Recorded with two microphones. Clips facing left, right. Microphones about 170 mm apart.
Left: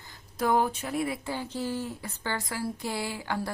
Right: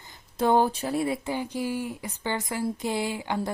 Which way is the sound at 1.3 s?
15° right (ahead or behind).